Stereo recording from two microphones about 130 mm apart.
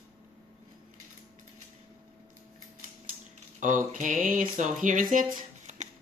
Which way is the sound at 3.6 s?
80° right.